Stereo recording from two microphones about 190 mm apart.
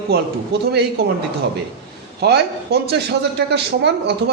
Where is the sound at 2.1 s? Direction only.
60° right (ahead or behind).